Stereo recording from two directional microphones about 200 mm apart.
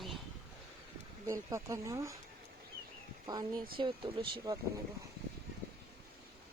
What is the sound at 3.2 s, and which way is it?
Speech, 20° right (ahead or behind).